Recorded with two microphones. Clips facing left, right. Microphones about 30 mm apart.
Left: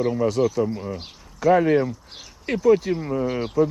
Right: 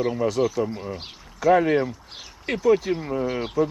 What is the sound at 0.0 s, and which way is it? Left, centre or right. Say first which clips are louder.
Speech: left 1 dB; right.